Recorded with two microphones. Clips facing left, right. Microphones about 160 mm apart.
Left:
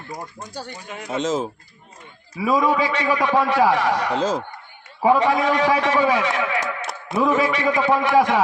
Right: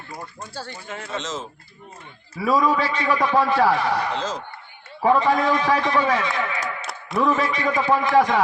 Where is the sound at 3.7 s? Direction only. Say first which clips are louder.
Left 2 dB; 90° left.